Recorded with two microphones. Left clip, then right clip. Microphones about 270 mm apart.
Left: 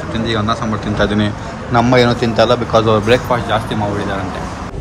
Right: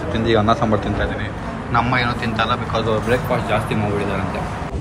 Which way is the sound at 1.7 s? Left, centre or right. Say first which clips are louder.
Left 7 dB; centre.